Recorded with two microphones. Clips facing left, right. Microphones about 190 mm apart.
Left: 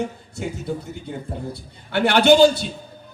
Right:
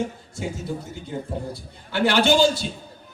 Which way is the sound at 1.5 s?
60° left (ahead or behind).